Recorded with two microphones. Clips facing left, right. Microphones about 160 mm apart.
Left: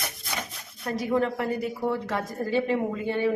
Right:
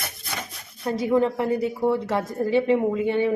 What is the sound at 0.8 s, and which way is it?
A woman's voice, 25° right (ahead or behind).